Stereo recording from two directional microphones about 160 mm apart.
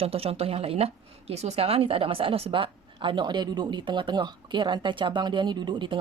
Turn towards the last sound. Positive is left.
turn(degrees=-30)  # may be behind; listen again after turning